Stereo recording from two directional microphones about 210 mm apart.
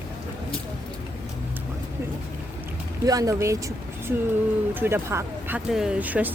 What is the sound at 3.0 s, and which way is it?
Speech, 15° right (ahead or behind).